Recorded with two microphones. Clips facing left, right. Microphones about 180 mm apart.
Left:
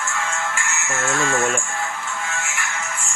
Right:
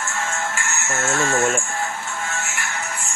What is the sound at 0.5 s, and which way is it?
Speech, 40° right (ahead or behind).